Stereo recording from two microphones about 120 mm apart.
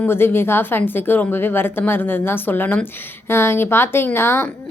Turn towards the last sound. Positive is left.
turn(degrees=20)  # may be behind; listen again after turning